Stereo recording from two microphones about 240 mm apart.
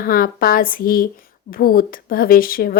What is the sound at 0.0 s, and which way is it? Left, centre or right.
Speech, left.